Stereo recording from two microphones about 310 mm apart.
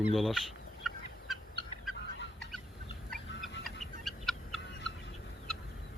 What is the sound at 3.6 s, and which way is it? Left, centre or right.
Fowl, centre.